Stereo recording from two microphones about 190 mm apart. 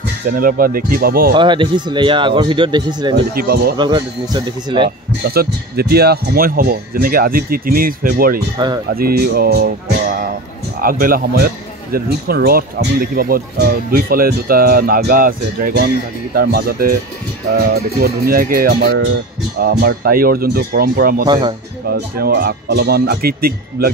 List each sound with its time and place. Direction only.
0.3 s speech: 50° right (ahead or behind)
1.3 s speech: 25° right (ahead or behind)
3.3 s speech: 55° right (ahead or behind)
3.7 s speech: 25° right (ahead or behind)
5.2 s speech: 55° right (ahead or behind)
8.6 s speech: 25° right (ahead or behind)
8.9 s speech: 55° right (ahead or behind)
10.8 s speech: 50° right (ahead or behind)
18.0 s speech: 50° right (ahead or behind)
21.3 s speech: 25° right (ahead or behind)
21.9 s speech: 55° right (ahead or behind)